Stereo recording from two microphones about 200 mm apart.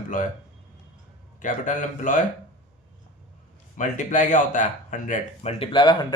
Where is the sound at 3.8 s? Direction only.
40° left (ahead or behind); by 6.2 s 20° left (ahead or behind).